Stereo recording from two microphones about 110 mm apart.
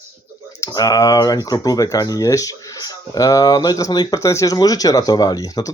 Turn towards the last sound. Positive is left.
turn(degrees=35)  # may be behind; listen again after turning